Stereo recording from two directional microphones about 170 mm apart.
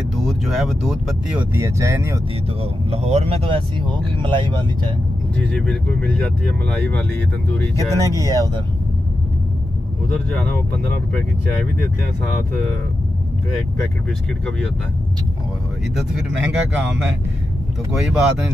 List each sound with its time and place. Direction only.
0.3 s speech: centre (ahead or behind); by 2.1 s 15° right (ahead or behind)
2.9 s speech: 40° right (ahead or behind)
5.4 s speech: 5° left (ahead or behind)
7.5 s speech: 20° left (ahead or behind)
8.1 s speech: 20° right (ahead or behind)
16.0 s speech: centre (ahead or behind)